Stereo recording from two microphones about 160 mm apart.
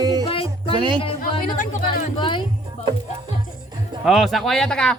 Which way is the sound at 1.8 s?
30° left (ahead or behind).